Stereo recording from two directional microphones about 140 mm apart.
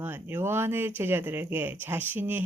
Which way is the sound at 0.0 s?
15° right (ahead or behind).